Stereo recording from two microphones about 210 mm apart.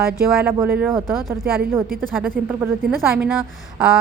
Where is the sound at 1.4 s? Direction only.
45° right (ahead or behind).